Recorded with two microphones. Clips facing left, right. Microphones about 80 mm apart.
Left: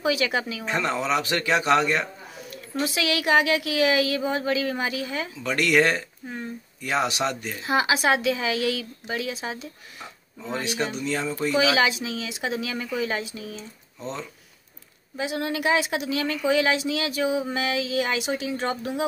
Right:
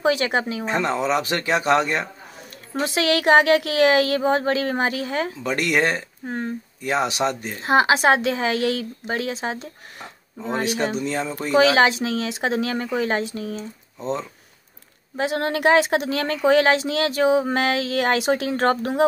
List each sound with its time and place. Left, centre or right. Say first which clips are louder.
0.0 s speech: right 4 dB; right
0.7 s speech: right 3 dB; right
2.8 s a woman's voice: right 5 dB; right
5.4 s speech: left 2 dB; right
6.2 s a woman's voice: right 6 dB; right
6.8 s speech: right 3 dB; right
11.1 s speech: right 2 dB; right
11.3 s a woman's voice: right 6 dB; right
13.9 s speech: right 7 dB; right
15.1 s a woman's voice: right 5 dB; right